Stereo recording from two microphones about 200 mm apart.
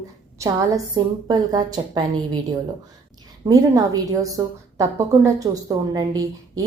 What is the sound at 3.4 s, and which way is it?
A woman's voice, 15° right (ahead or behind).